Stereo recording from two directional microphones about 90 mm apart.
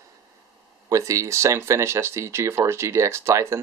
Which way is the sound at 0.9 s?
35° right (ahead or behind).